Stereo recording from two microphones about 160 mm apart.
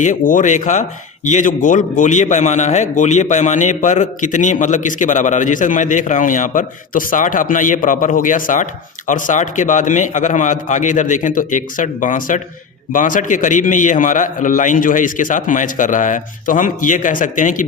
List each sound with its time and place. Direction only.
0.0 s a man's voice: 55° left (ahead or behind)